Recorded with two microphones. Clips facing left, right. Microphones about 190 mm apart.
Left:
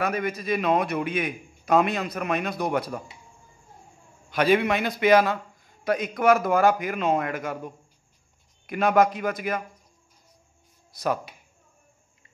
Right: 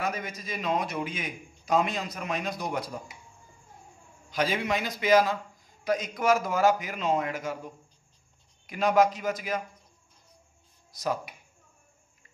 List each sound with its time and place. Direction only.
0.0 s a man's voice: 60° left (ahead or behind)
4.3 s a man's voice: 60° left (ahead or behind)
10.9 s speech: 60° left (ahead or behind)